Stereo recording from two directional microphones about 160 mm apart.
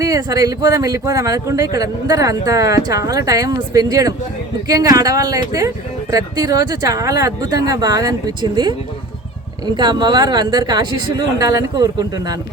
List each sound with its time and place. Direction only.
0.0 s speech: 20° right (ahead or behind)